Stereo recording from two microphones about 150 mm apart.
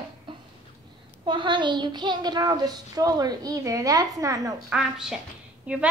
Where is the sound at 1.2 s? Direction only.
30° right (ahead or behind).